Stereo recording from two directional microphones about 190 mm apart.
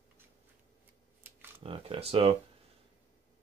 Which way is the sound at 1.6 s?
30° right (ahead or behind).